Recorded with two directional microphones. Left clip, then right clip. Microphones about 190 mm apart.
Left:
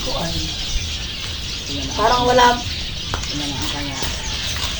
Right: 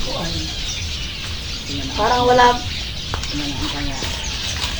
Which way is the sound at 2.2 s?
65° left (ahead or behind).